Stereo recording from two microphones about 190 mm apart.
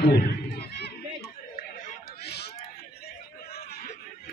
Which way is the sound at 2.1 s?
60° left (ahead or behind).